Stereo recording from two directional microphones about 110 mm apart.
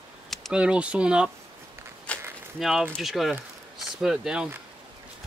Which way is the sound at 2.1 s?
10° left (ahead or behind).